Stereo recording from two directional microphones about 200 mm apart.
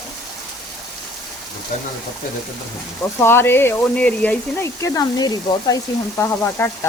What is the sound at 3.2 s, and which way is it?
Speech, 10° left (ahead or behind).